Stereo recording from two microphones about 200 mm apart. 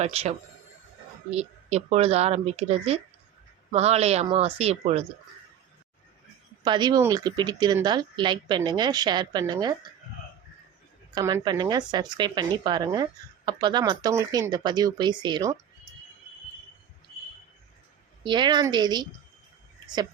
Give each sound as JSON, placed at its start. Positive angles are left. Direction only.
{"t": 0.0, "sound": "speech", "side_deg": -30}
{"t": 6.7, "sound": "a woman's voice", "side_deg": -20}
{"t": 11.1, "sound": "a woman's voice", "side_deg": -20}
{"t": 18.2, "sound": "a woman's voice", "side_deg": -25}